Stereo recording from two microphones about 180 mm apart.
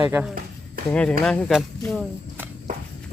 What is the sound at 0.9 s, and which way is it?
Speech, 5° left (ahead or behind).